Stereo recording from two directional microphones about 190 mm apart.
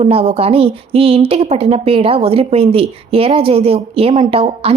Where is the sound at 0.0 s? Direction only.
30° right (ahead or behind).